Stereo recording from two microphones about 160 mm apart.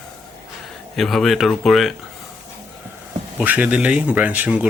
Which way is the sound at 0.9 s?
Centre (ahead or behind).